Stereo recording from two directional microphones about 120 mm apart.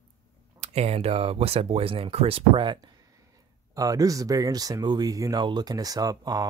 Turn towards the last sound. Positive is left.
turn(degrees=-35)  # may be behind; listen again after turning